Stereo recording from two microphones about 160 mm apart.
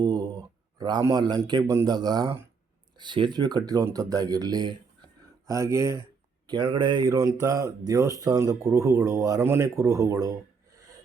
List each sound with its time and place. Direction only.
0.0 s speech: 25° right (ahead or behind)